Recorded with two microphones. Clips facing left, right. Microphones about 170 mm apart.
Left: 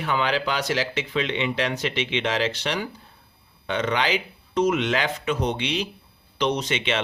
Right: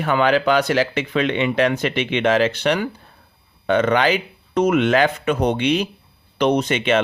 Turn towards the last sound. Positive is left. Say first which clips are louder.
# right 7 dB
turn(degrees=-50)  # may be behind; listen again after turning